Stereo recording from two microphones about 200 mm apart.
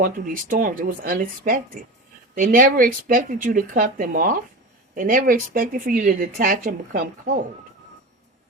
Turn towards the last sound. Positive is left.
turn(degrees=-40)  # may be behind; listen again after turning